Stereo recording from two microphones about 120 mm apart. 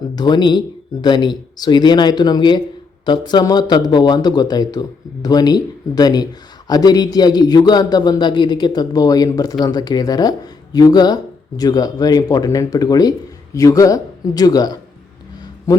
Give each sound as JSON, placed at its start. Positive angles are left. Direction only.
{"t": 0.2, "sound": "speech", "side_deg": 35}